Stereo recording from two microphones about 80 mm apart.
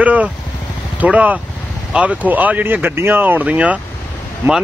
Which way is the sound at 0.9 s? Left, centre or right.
Centre.